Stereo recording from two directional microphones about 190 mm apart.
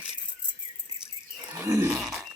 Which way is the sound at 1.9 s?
5° right (ahead or behind).